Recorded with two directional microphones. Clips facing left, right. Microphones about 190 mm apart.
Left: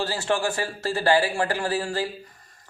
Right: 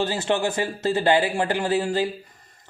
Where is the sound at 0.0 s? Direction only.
20° right (ahead or behind).